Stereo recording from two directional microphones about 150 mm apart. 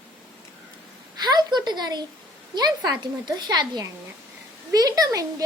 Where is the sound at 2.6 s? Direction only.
25° right (ahead or behind).